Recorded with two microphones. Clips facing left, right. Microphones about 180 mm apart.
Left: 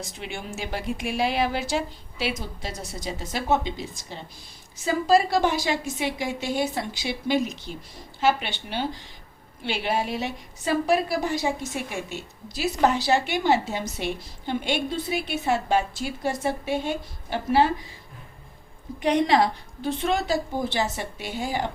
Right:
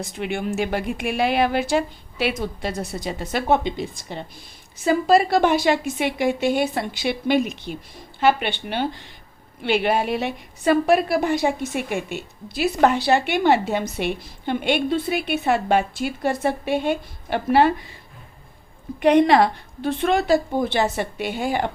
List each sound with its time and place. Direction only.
0.0 s a woman's voice: 55° right (ahead or behind)
19.0 s a woman's voice: 60° right (ahead or behind)